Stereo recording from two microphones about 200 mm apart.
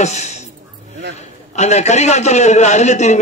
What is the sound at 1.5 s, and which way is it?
A man's voice, 35° left (ahead or behind).